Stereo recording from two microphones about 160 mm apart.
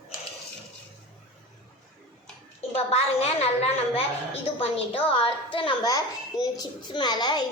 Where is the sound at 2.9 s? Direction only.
40° left (ahead or behind).